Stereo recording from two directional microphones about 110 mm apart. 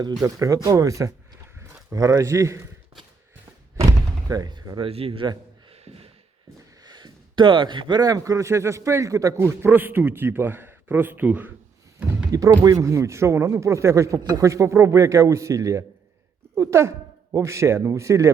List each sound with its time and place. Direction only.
0.2 s speech: 30° right (ahead or behind)
3.8 s a sound: 35° right (ahead or behind)
4.8 s speech: 60° right (ahead or behind)
5.7 s gasp: 65° right (ahead or behind)
6.8 s speech: 40° right (ahead or behind); by 11.5 s 15° right (ahead or behind)
12.3 s speech: 30° right (ahead or behind)